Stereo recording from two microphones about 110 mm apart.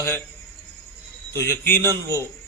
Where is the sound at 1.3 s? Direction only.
25° left (ahead or behind).